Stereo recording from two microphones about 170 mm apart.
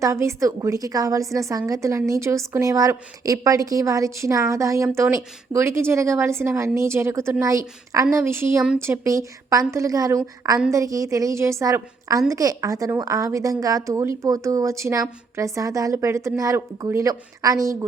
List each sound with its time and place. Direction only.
0.0 s a woman's voice: 15° right (ahead or behind)